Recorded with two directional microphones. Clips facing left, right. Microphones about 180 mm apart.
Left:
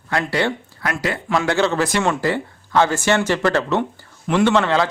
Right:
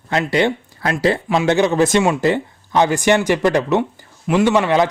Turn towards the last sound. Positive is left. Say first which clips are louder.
# right 2 dB
turn(degrees=-15)  # may be behind; listen again after turning